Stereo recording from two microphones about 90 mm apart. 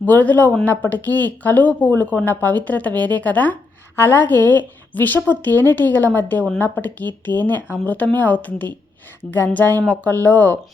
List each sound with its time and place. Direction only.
0.0 s speech: 20° left (ahead or behind)